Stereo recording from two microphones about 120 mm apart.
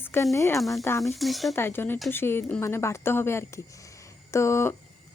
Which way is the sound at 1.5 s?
20° left (ahead or behind).